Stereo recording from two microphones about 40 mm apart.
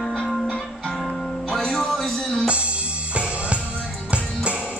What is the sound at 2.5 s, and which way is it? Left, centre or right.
Music, right.